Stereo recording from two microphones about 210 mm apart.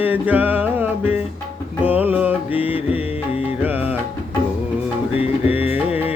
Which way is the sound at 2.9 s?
30° left (ahead or behind).